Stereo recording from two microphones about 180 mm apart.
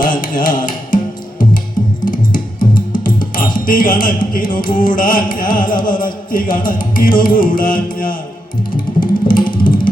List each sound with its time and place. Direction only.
0.0 s mantra: 50° left (ahead or behind)
2.0 s music: 50° left (ahead or behind)